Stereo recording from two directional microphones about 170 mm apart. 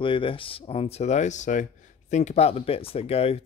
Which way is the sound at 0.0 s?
30° left (ahead or behind).